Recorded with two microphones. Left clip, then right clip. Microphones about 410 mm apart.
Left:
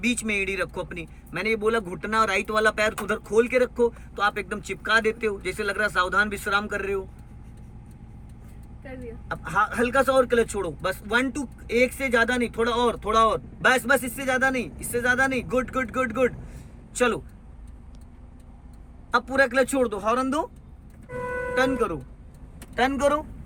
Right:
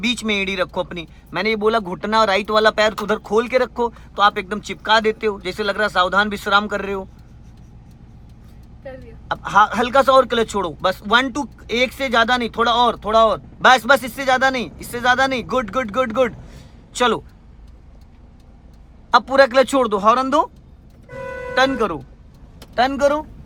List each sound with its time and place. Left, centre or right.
0.0 s speech: centre
9.3 s speech: centre
19.1 s speech: centre
21.5 s speech: centre